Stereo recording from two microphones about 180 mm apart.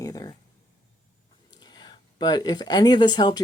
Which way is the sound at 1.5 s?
25° left (ahead or behind).